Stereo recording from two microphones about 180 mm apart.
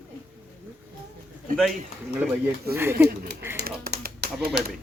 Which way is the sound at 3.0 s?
65° right (ahead or behind).